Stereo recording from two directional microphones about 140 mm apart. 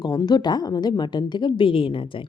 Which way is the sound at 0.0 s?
25° left (ahead or behind).